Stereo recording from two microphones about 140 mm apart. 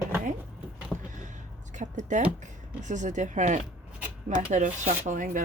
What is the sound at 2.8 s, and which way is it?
Speech, 60° right (ahead or behind).